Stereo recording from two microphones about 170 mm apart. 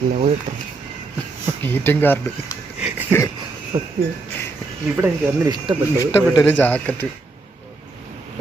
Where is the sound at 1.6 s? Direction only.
10° left (ahead or behind).